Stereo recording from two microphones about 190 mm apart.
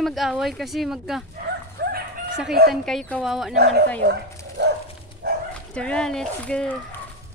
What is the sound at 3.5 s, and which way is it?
Speech, 55° right (ahead or behind).